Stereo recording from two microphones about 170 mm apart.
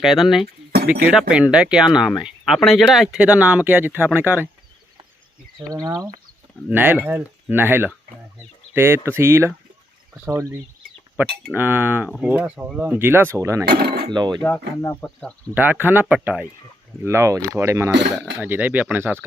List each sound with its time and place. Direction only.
0.0 s speech: centre (ahead or behind)
0.4 s chink: 65° right (ahead or behind)
1.3 s speech: 5° right (ahead or behind)
5.5 s speech: 20° right (ahead or behind)
11.2 s speech: 10° right (ahead or behind)
13.7 s speech: 65° right (ahead or behind)
14.1 s speech: 25° right (ahead or behind)
14.8 s speech: 15° left (ahead or behind)
15.5 s speech: 10° right (ahead or behind)